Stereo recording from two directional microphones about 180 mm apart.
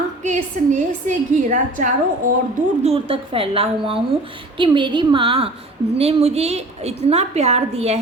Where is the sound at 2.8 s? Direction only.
35° right (ahead or behind).